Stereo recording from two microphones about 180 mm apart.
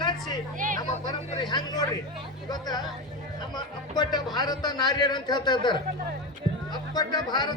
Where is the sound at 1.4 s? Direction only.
25° left (ahead or behind).